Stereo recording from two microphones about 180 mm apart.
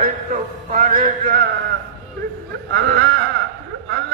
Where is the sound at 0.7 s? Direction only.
55° right (ahead or behind).